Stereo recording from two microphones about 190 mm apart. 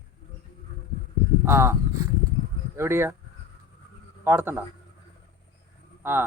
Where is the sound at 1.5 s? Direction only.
15° right (ahead or behind).